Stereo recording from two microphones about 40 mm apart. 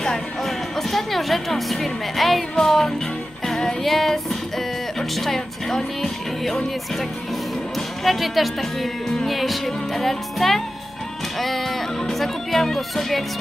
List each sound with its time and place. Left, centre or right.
0.4 s a woman's voice: centre
3.4 s music: centre
8.0 s a woman's voice: centre
11.3 s music: centre
12.1 s speech: centre